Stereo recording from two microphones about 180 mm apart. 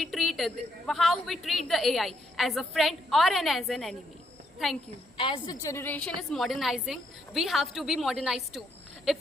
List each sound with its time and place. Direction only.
0.0 s a woman's voice: centre (ahead or behind)
5.1 s a woman's voice: 30° left (ahead or behind)
5.6 s a woman's voice: 15° left (ahead or behind)
6.1 s a woman's voice: centre (ahead or behind)